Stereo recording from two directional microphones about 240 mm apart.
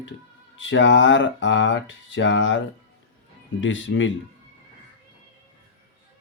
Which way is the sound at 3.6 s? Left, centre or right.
Left.